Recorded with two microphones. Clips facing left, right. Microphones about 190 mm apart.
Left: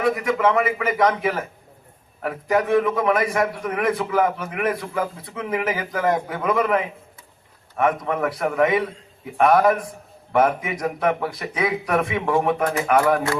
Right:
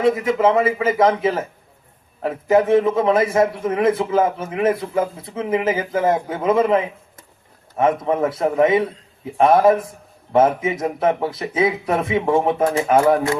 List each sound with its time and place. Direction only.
0.0 s a man's voice: 25° right (ahead or behind)